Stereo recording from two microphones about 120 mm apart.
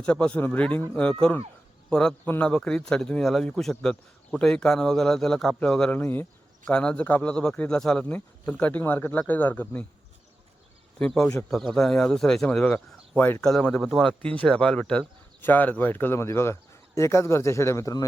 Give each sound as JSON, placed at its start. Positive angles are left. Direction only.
{"t": 0.0, "sound": "a man's voice", "side_deg": 10}
{"t": 11.0, "sound": "speech", "side_deg": 5}
{"t": 13.5, "sound": "speech", "side_deg": 5}
{"t": 14.2, "sound": "speech", "side_deg": 10}